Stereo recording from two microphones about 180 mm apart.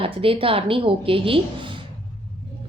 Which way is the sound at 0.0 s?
30° right (ahead or behind).